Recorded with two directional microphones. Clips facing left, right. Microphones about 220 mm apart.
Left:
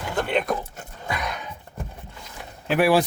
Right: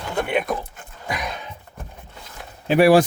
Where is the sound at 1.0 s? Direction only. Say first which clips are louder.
Right 1 dB; 20° right (ahead or behind).